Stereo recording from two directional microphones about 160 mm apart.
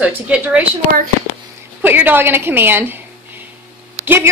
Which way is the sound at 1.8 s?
10° right (ahead or behind).